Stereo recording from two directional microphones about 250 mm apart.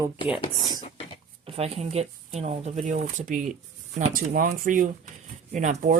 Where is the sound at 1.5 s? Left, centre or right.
Right.